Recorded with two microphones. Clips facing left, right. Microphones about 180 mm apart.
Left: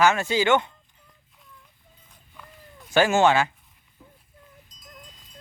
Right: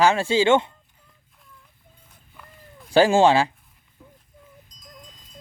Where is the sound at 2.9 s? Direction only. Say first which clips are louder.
Right 3 dB; 30° right (ahead or behind).